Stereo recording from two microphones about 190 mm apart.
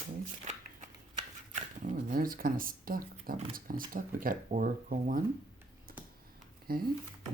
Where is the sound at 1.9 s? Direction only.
45° right (ahead or behind).